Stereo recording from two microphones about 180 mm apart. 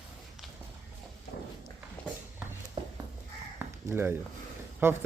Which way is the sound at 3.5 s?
15° right (ahead or behind).